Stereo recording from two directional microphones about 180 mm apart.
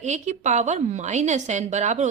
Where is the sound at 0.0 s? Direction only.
40° right (ahead or behind).